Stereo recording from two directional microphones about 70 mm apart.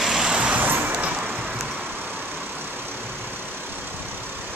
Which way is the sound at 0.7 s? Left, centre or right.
Right.